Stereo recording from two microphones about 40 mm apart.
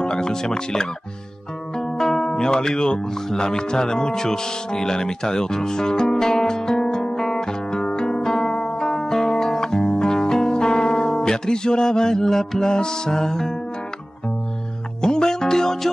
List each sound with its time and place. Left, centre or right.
0.0 s speech: centre
1.8 s music: centre
15.0 s music: centre